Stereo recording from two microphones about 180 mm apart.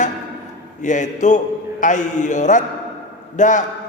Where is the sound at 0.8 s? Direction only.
45° left (ahead or behind).